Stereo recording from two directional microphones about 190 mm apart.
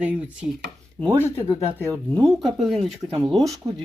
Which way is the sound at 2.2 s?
Centre (ahead or behind).